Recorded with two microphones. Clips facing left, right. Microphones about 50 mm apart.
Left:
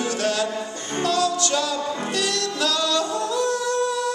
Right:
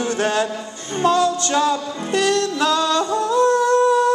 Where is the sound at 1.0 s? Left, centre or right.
Right.